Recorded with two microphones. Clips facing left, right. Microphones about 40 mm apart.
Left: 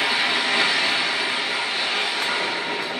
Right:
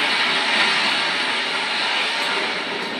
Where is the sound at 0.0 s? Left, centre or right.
Centre.